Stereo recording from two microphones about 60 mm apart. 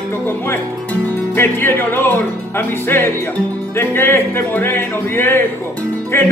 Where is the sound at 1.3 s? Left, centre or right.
Left.